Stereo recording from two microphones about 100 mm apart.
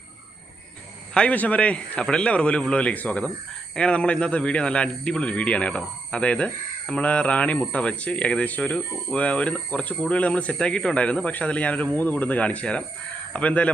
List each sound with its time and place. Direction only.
1.1 s a man's voice: 10° left (ahead or behind)